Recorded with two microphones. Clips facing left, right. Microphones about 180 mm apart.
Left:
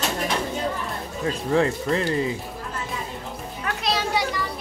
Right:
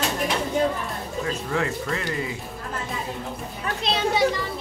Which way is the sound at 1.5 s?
30° left (ahead or behind).